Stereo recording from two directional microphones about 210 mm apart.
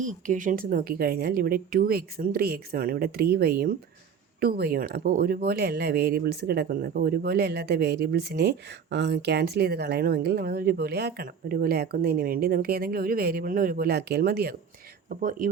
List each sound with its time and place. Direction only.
0.0 s speech: 35° right (ahead or behind)